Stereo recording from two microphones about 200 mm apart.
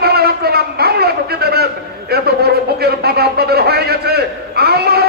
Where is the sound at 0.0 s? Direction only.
50° right (ahead or behind).